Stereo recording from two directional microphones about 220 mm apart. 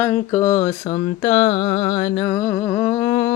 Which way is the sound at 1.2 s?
25° left (ahead or behind).